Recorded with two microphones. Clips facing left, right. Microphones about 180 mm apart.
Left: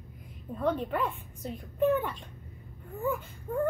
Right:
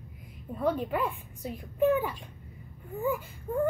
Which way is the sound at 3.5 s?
15° right (ahead or behind).